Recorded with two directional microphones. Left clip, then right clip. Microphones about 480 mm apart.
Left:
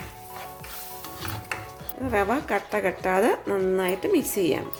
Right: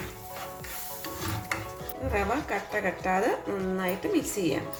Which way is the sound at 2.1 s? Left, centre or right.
Left.